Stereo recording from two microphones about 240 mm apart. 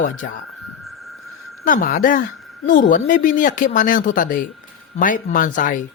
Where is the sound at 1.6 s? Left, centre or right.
Left.